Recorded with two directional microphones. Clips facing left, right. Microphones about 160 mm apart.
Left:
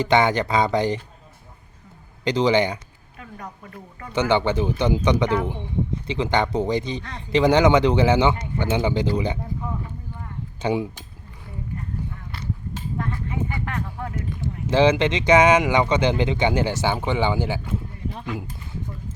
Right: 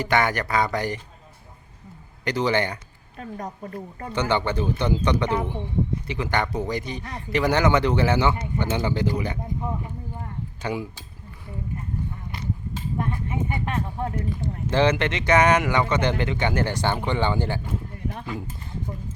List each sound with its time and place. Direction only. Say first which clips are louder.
0.0 s a man's voice: left 4 dB; 20° left (ahead or behind)
2.2 s speech: left 4 dB; 20° left (ahead or behind)
3.2 s speech: right 5 dB; 35° right (ahead or behind)
4.1 s a man's voice: left 4 dB; 15° left (ahead or behind)
10.6 s a man's voice: left 6 dB; 25° left (ahead or behind)
13.0 s speech: even; 20° right (ahead or behind)
14.7 s speech: left 3 dB; 15° left (ahead or behind)